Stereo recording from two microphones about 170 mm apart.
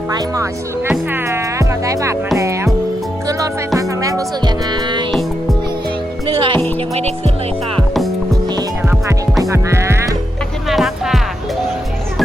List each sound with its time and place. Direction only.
0.9 s speech: 15° right (ahead or behind)
3.2 s music: 20° right (ahead or behind)
6.2 s music: 30° right (ahead or behind)
9.4 s music: 15° right (ahead or behind)
10.7 s music: centre (ahead or behind)